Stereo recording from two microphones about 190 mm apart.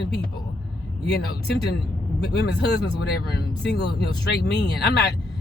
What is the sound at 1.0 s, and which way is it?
Speech, 60° left (ahead or behind).